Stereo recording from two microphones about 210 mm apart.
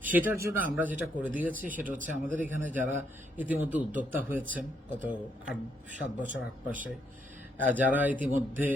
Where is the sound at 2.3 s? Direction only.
10° right (ahead or behind).